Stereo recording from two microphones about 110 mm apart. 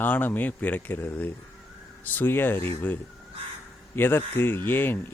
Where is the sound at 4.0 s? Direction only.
20° left (ahead or behind).